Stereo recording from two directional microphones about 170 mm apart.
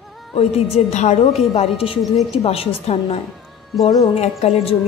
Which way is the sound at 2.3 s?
35° left (ahead or behind).